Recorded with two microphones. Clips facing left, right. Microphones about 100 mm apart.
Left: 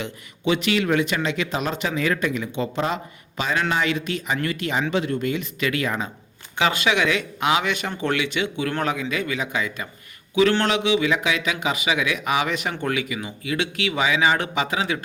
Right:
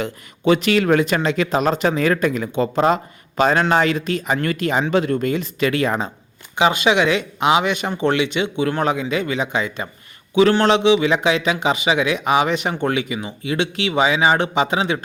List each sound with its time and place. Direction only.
0.0 s a man's voice: 45° right (ahead or behind)
5.3 s a man's voice: 35° right (ahead or behind)
6.6 s a man's voice: 20° right (ahead or behind)